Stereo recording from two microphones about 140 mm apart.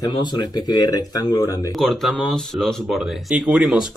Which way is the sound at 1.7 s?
Centre (ahead or behind).